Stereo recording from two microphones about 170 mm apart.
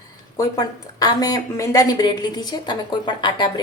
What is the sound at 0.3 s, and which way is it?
A woman's voice, 20° left (ahead or behind).